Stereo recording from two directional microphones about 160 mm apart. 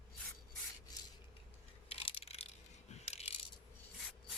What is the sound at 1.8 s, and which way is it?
Coin, 35° left (ahead or behind).